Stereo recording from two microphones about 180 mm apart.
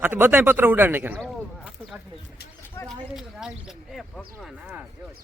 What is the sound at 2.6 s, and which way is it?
Speech, 10° left (ahead or behind).